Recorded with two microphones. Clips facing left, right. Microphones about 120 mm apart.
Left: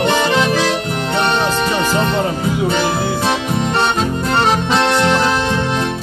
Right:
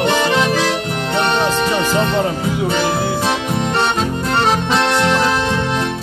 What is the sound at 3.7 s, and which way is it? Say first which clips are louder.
Accordion: left 1 dB; 5° left (ahead or behind).